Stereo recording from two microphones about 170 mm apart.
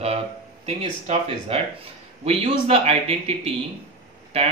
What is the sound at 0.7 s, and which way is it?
Speech, 40° right (ahead or behind).